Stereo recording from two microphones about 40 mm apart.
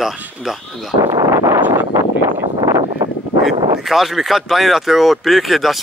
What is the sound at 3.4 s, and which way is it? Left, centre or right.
Speech, centre.